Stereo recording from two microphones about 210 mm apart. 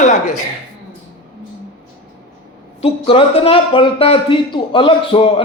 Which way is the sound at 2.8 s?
25° left (ahead or behind).